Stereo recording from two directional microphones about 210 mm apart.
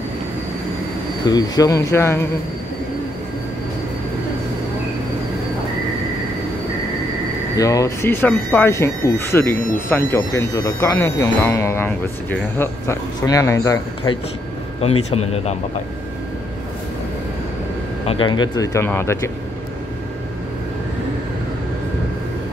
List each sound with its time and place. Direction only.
1.2 s speech: 20° left (ahead or behind)
7.5 s speech: 15° left (ahead or behind)
14.8 s speech: 30° left (ahead or behind)
18.0 s speech: 25° left (ahead or behind)